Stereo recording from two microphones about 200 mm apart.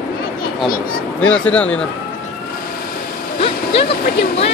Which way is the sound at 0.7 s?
45° left (ahead or behind).